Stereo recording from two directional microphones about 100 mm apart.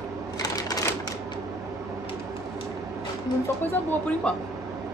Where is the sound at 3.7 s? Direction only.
15° left (ahead or behind).